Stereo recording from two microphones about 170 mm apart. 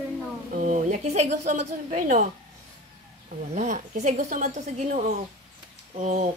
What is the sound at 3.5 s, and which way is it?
A woman's voice, 45° right (ahead or behind).